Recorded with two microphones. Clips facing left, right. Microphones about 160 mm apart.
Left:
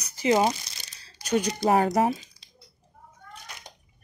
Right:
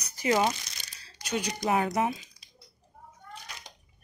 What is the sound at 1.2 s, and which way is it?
Speech, 45° left (ahead or behind).